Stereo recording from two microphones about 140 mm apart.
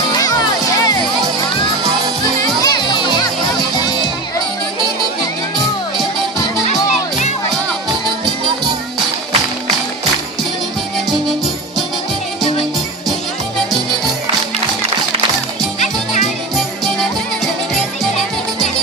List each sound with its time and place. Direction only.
2.4 s music: 30° left (ahead or behind)
6.9 s music: 55° left (ahead or behind)